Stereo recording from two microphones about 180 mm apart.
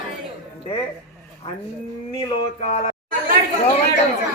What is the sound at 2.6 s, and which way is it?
Speech, 40° left (ahead or behind).